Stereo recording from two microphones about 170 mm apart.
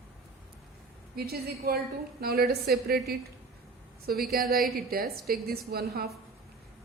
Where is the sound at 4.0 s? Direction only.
65° right (ahead or behind).